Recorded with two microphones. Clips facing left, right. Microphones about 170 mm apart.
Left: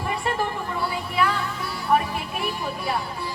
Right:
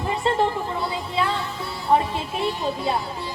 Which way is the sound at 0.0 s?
25° right (ahead or behind).